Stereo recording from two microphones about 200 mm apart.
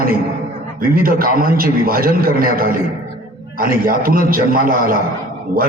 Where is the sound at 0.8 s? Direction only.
45° right (ahead or behind).